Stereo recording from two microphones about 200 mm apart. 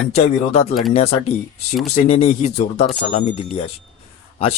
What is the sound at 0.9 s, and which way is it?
A man's voice, 30° left (ahead or behind).